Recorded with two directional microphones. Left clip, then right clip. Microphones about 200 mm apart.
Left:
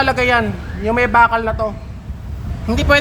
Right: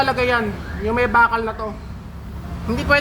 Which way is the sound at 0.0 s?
25° left (ahead or behind).